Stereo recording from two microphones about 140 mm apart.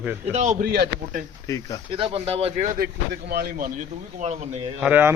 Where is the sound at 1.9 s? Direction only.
45° right (ahead or behind).